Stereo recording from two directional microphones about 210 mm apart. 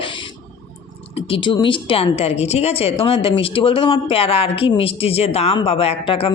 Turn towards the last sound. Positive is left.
turn(degrees=25)  # may be behind; listen again after turning